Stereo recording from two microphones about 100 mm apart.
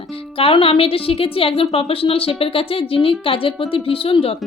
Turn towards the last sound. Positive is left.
turn(degrees=70)  # may be behind; listen again after turning